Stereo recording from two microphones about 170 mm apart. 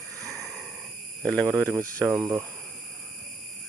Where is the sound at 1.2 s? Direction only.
5° left (ahead or behind).